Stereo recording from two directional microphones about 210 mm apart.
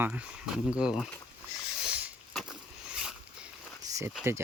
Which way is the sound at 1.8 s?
5° right (ahead or behind).